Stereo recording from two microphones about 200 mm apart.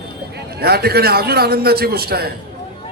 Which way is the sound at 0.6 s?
50° right (ahead or behind).